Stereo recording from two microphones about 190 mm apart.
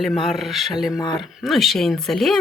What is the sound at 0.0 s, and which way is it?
Speech, centre (ahead or behind).